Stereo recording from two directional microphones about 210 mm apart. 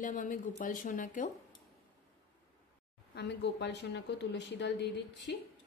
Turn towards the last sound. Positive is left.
turn(degrees=55)  # may be behind; listen again after turning